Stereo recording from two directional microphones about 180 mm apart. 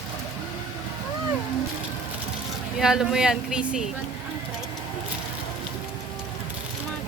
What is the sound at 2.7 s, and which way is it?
Speech, 5° right (ahead or behind).